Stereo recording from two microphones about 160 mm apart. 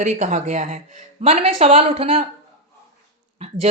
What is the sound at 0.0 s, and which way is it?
Speech, 45° right (ahead or behind).